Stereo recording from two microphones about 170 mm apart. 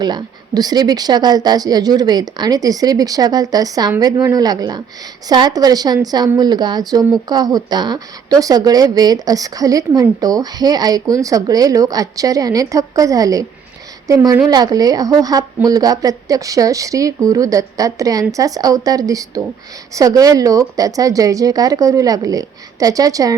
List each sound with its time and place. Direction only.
0.0 s a woman's voice: 25° right (ahead or behind)